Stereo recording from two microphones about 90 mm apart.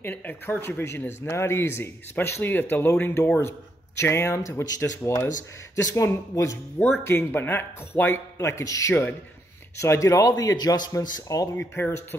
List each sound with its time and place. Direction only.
0.0 s speech: 20° left (ahead or behind); by 11.4 s 45° left (ahead or behind)
11.5 s speech: 25° left (ahead or behind)